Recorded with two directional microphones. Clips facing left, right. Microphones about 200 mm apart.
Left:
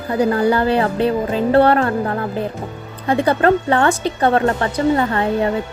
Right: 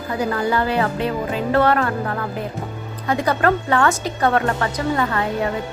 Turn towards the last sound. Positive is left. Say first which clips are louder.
# left 4 dB
turn(degrees=30)  # may be behind; listen again after turning